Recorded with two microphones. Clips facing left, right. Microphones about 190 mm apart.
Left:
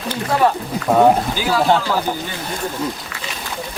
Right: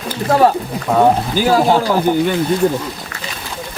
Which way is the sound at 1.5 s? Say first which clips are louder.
Right 4 dB; 45° right (ahead or behind).